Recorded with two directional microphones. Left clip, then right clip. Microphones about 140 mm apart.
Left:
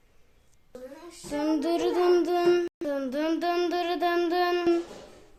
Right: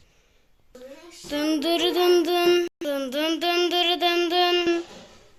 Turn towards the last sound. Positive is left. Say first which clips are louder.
# right 4 dB
turn(degrees=5)  # may be behind; listen again after turning